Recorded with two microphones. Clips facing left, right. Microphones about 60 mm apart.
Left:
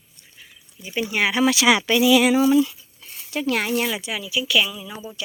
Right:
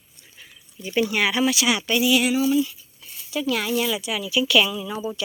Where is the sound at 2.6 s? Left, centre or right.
Left.